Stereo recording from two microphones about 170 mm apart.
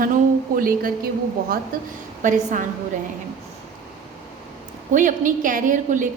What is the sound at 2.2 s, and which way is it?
Speech, 50° right (ahead or behind).